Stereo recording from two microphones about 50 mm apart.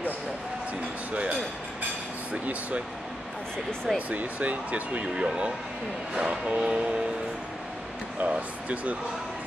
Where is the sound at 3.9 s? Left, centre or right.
Right.